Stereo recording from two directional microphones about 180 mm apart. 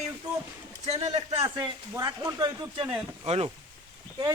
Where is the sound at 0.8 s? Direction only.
35° right (ahead or behind).